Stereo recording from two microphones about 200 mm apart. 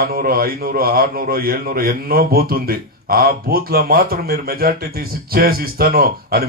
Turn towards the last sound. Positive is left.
turn(degrees=-50)  # may be behind; listen again after turning